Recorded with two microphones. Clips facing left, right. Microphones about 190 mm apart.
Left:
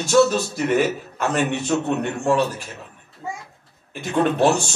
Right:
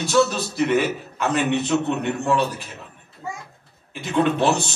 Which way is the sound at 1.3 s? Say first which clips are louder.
Right 1 dB; 50° left (ahead or behind).